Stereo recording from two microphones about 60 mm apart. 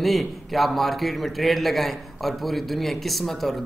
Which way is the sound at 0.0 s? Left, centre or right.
Centre.